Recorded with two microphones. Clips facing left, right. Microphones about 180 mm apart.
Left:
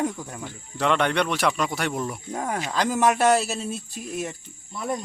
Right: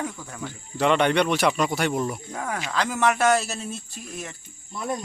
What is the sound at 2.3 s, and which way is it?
Speech, 20° left (ahead or behind).